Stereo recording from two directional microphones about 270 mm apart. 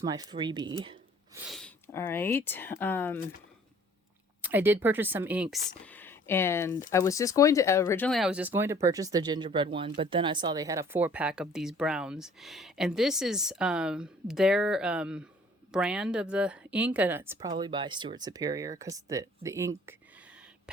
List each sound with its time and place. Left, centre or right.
0.0 s speech: centre
1.5 s speech: centre
4.4 s speech: centre